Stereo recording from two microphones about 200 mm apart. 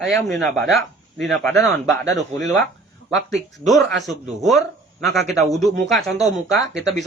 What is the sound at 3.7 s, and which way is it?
A man's voice, centre (ahead or behind).